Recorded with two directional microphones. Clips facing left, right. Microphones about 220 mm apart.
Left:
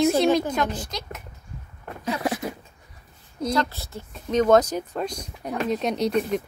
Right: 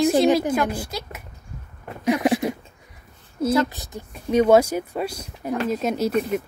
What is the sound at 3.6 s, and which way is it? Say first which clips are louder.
Speech: right 5 dB; 15° right (ahead or behind).